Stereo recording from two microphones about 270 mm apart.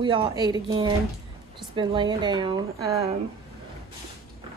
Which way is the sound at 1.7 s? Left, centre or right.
Centre.